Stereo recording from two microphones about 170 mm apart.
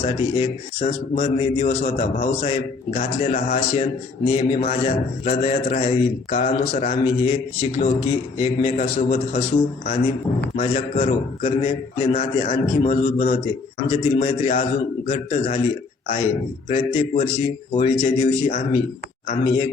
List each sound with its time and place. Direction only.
0.0 s a man's voice: 40° left (ahead or behind)
10.6 s a man's voice: 40° left (ahead or behind)
16.6 s a man's voice: 40° left (ahead or behind)